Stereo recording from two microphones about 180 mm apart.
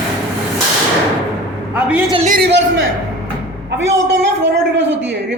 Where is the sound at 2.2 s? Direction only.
50° right (ahead or behind).